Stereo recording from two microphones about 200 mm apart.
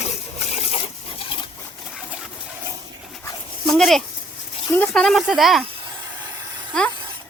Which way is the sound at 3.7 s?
Centre (ahead or behind).